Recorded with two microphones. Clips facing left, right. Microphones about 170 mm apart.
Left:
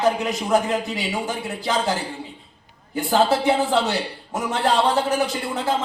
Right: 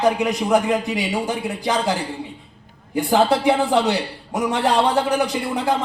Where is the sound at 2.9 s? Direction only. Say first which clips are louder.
Right 2 dB; 15° right (ahead or behind).